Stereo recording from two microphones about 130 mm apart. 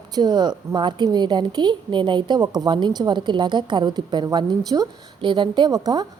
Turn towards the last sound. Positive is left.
turn(degrees=-30)  # may be behind; listen again after turning